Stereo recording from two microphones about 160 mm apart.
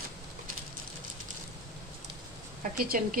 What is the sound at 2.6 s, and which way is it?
Speech, 55° right (ahead or behind).